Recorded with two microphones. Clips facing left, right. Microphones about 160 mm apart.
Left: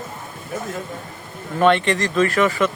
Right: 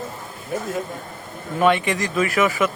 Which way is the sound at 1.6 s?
10° right (ahead or behind).